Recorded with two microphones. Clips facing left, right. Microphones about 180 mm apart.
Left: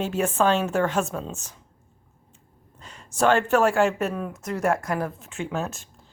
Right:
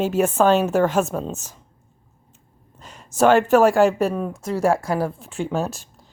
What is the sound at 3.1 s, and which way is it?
A woman's voice, 40° right (ahead or behind).